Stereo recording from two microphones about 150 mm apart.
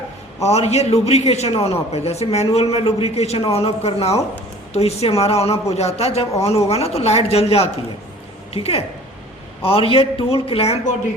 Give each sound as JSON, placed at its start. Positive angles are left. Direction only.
{"t": 0.4, "sound": "a man's voice", "side_deg": 45}